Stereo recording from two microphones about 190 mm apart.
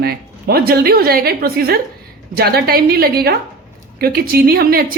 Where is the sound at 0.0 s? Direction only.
55° right (ahead or behind).